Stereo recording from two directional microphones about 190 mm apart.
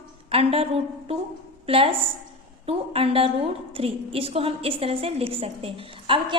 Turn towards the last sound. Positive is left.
turn(degrees=-25)  # may be behind; listen again after turning